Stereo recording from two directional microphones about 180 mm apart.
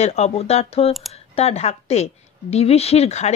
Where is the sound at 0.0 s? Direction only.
40° left (ahead or behind).